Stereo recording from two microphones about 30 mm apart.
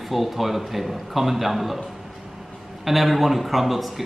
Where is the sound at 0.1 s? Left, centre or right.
Centre.